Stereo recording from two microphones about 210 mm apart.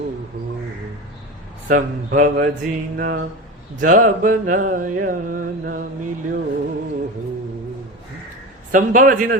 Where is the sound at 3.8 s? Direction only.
40° right (ahead or behind).